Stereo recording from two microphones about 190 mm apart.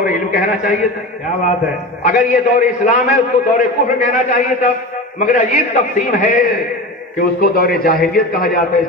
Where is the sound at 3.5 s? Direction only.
45° left (ahead or behind).